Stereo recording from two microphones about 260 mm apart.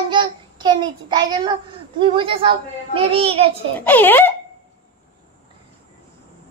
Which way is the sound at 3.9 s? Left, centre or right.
Centre.